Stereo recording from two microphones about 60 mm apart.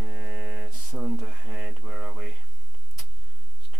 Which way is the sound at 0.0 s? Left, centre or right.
Centre.